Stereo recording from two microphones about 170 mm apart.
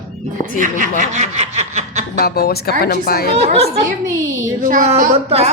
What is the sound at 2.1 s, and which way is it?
A woman's voice, 65° left (ahead or behind).